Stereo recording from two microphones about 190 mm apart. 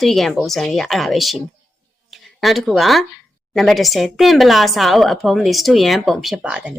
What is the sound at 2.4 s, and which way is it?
Speech, centre (ahead or behind).